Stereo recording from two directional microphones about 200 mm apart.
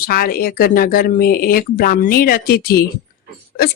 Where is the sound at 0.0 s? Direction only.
45° left (ahead or behind).